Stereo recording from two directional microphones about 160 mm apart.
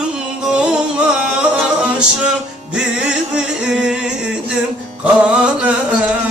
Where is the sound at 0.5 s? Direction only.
5° right (ahead or behind).